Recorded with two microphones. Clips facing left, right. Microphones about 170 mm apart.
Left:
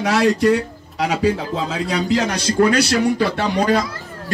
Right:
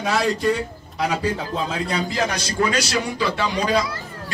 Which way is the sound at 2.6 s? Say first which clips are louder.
Left 7 dB; 60° left (ahead or behind).